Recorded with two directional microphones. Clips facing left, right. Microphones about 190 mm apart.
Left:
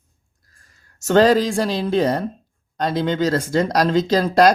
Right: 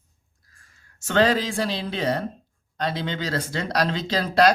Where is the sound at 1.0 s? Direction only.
40° left (ahead or behind).